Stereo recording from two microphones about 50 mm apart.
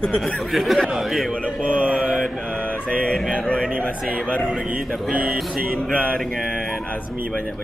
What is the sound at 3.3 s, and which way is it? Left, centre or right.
Speech, left.